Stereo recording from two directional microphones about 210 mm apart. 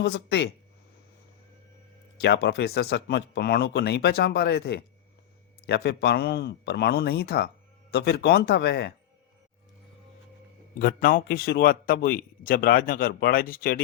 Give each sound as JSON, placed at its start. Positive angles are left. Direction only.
{"t": 0.0, "sound": "speech", "side_deg": 55}
{"t": 2.1, "sound": "speech", "side_deg": 50}
{"t": 10.8, "sound": "speech", "side_deg": 45}